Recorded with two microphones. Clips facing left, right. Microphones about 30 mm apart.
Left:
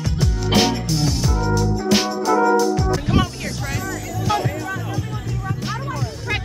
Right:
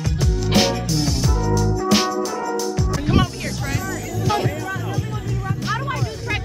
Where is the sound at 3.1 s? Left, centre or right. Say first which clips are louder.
Even; centre.